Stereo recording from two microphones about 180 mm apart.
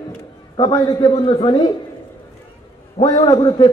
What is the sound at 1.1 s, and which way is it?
Speech, 35° left (ahead or behind).